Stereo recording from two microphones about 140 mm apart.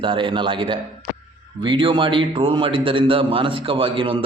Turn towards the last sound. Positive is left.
turn(degrees=-40)  # may be behind; listen again after turning